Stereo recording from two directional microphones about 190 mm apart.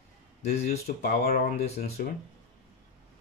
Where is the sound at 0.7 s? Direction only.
55° left (ahead or behind).